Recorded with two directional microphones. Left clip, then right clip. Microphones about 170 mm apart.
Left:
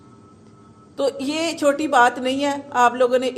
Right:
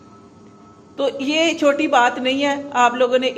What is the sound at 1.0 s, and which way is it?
A woman's voice, 40° left (ahead or behind).